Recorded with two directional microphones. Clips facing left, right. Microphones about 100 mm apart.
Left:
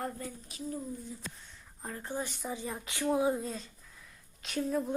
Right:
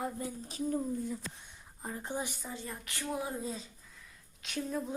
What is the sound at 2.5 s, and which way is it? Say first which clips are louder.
Speech: left 4 dB; 15° left (ahead or behind).